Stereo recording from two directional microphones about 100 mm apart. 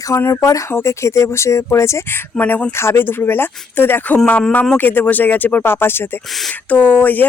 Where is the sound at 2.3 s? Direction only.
15° left (ahead or behind).